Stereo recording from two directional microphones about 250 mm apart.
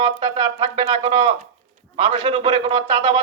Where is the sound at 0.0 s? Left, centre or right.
Centre.